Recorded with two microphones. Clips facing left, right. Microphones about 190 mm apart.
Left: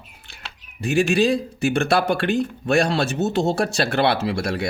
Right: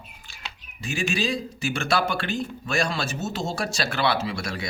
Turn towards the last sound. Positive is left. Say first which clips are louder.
# left 6 dB
turn(degrees=60)  # may be behind; listen again after turning